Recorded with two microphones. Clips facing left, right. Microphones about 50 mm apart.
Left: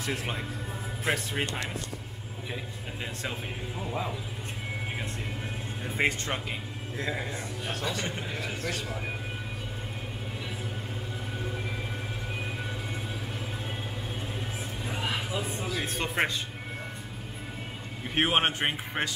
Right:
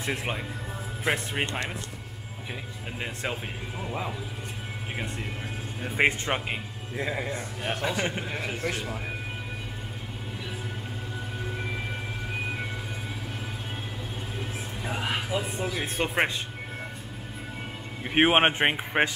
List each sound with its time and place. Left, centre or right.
0.0 s a man's voice: right
3.0 s a man's voice: right
3.8 s speech: centre
5.9 s a man's voice: right
14.9 s a sound: right
15.6 s a man's voice: centre
18.0 s a man's voice: right